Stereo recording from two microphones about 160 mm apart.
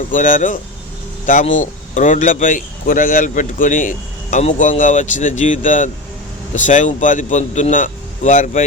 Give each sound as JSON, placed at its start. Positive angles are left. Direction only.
{"t": 0.1, "sound": "speech", "side_deg": 55}
{"t": 2.0, "sound": "speech", "side_deg": 55}